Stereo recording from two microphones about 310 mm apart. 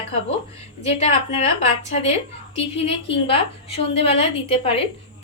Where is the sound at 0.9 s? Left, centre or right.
Left.